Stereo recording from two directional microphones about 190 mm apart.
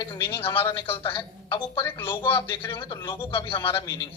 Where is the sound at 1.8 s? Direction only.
10° left (ahead or behind).